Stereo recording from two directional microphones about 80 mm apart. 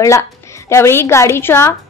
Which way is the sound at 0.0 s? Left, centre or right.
Left.